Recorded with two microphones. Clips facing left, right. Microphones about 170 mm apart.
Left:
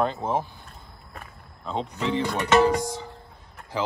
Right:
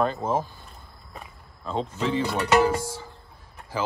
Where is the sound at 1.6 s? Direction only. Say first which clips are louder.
Right 1 dB; 15° left (ahead or behind).